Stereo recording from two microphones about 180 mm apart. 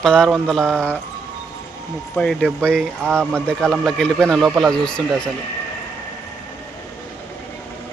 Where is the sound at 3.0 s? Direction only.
15° right (ahead or behind).